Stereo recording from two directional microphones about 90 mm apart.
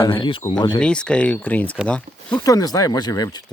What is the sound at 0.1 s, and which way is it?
Speech, 70° left (ahead or behind).